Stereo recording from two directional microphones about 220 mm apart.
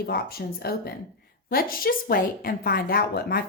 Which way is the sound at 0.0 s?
45° left (ahead or behind).